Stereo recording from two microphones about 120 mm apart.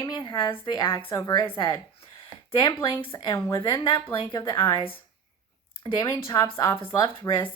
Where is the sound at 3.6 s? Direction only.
40° left (ahead or behind).